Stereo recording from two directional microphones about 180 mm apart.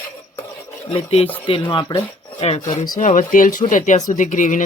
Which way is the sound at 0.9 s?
35° left (ahead or behind).